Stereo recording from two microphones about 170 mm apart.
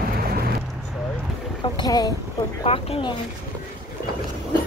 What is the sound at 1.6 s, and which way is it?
Speech, 25° left (ahead or behind).